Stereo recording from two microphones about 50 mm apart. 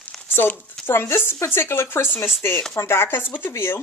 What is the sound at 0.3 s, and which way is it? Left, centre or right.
Speech, left.